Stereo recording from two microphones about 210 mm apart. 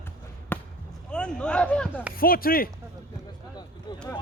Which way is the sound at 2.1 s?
45° left (ahead or behind).